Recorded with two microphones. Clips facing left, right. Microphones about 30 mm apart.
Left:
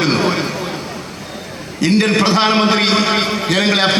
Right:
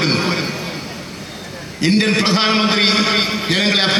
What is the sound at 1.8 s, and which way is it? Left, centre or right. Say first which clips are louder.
Speech: left 1 dB; right.